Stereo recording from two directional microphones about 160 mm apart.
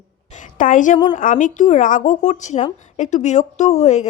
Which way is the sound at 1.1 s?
55° left (ahead or behind).